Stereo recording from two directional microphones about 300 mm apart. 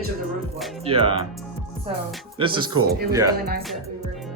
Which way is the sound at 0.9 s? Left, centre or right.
Centre.